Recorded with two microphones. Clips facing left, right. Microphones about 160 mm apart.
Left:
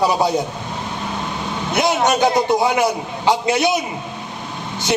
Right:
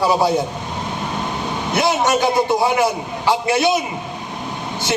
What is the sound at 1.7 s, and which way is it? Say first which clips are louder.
A man's voice: even; 20° left (ahead or behind).